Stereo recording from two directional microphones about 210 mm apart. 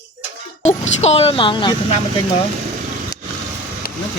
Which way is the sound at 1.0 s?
30° left (ahead or behind).